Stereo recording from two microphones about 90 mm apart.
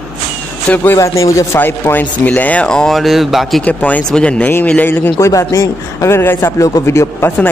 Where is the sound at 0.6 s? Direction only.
20° left (ahead or behind).